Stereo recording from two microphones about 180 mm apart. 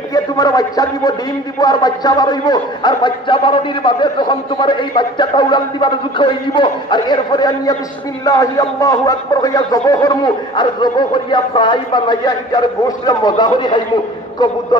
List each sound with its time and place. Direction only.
0.1 s speech: 20° left (ahead or behind)